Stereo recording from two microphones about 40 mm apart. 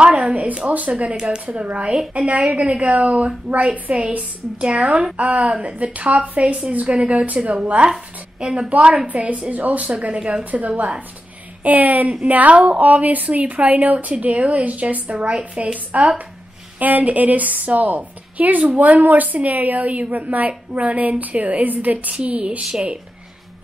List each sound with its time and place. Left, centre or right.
0.0 s a sound: right
0.7 s a woman's voice: right
1.1 s a woman's voice: right
1.4 s a woman's voice: right
10.5 s a woman's voice: right
15.1 s a woman's voice: right
15.6 s a woman's voice: right
22.1 s a woman's voice: right